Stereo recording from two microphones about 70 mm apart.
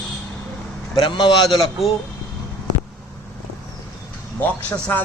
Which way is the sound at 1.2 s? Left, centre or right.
Left.